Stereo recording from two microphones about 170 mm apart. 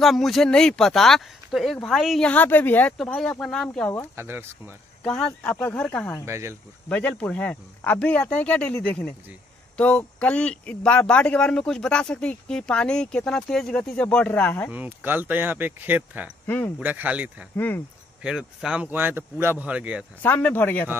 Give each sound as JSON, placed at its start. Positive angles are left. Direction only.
{"t": 0.0, "sound": "speech", "side_deg": 0}
{"t": 4.2, "sound": "speech", "side_deg": -15}
{"t": 5.0, "sound": "speech", "side_deg": 5}
{"t": 6.2, "sound": "speech", "side_deg": -15}
{"t": 6.9, "sound": "speech", "side_deg": 10}
{"t": 14.7, "sound": "speech", "side_deg": -10}
{"t": 16.4, "sound": "speech", "side_deg": 10}
{"t": 16.8, "sound": "speech", "side_deg": -10}
{"t": 17.6, "sound": "speech", "side_deg": 10}
{"t": 18.2, "sound": "speech", "side_deg": -5}
{"t": 20.2, "sound": "speech", "side_deg": 10}